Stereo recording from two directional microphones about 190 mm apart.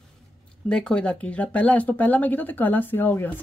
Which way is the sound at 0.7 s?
5° left (ahead or behind).